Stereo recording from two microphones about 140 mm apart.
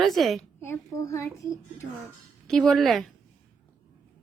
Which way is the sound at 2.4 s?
5° left (ahead or behind).